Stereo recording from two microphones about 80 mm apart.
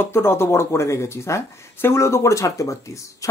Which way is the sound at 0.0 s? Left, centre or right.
Left.